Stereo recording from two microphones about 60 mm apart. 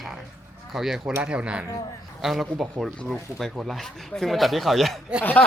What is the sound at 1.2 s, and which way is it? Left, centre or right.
Speech, centre.